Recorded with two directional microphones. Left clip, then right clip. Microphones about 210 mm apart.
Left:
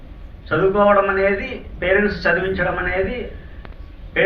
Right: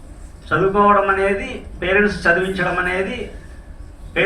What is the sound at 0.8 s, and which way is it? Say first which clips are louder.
A man's voice: right 1 dB; 5° right (ahead or behind).